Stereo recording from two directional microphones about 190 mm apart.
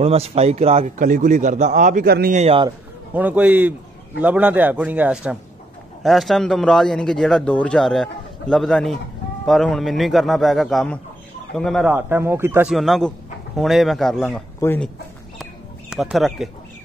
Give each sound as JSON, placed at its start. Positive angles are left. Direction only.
{"t": 0.0, "sound": "a man's voice", "side_deg": -30}
{"t": 2.0, "sound": "speech", "side_deg": -55}
{"t": 2.3, "sound": "a man's voice", "side_deg": -30}
{"t": 3.1, "sound": "a man's voice", "side_deg": -10}
{"t": 11.9, "sound": "a man's voice", "side_deg": -10}
{"t": 12.7, "sound": "a man's voice", "side_deg": 0}
{"t": 15.9, "sound": "a man's voice", "side_deg": 0}